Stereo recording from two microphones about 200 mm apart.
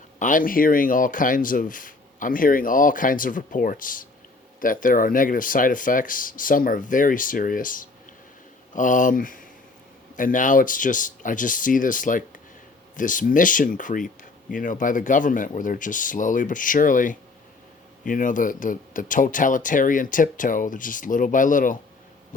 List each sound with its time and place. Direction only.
0.2 s speech: 40° left (ahead or behind)